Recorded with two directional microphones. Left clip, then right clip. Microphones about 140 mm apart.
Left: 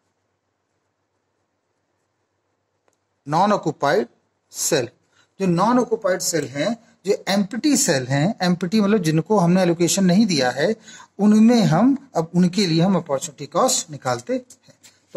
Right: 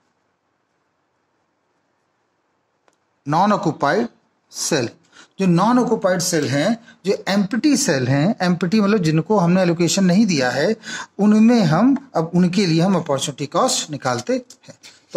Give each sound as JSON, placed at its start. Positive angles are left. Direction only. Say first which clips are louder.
{"t": 2.8, "sound": "a sound", "louder": "right 6 dB", "side_deg": -30}
{"t": 5.7, "sound": "speech", "louder": "right 3 dB", "side_deg": -25}
{"t": 6.8, "sound": "speech", "louder": "right 1 dB", "side_deg": -40}